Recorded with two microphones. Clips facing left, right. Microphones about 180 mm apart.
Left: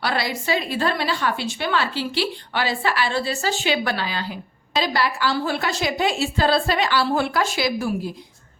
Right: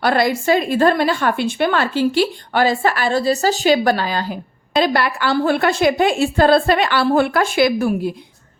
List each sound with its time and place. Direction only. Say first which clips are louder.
0.0 s a woman's voice: right 8 dB; 50° right (ahead or behind)